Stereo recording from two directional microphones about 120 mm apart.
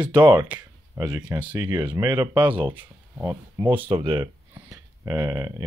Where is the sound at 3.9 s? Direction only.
45° right (ahead or behind).